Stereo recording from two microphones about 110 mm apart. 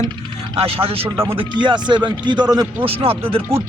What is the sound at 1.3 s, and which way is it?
Speech, 50° right (ahead or behind).